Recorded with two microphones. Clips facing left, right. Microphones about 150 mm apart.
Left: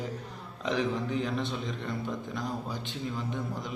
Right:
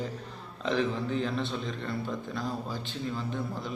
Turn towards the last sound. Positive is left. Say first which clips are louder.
# right 1 dB
turn(degrees=15)  # may be behind; listen again after turning